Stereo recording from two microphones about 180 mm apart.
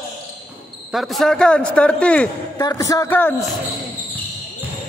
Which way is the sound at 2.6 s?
20° left (ahead or behind).